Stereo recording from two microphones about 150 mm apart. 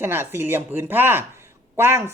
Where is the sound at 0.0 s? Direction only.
15° right (ahead or behind).